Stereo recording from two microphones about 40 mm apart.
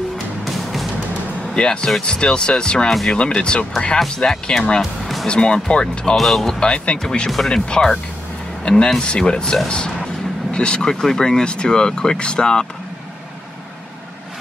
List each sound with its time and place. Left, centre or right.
1.5 s speech: left
6.1 s speech: centre
6.6 s speech: left